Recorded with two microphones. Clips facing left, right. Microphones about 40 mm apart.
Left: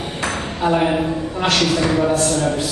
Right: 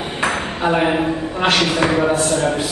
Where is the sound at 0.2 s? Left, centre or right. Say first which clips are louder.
Right 2 dB; centre.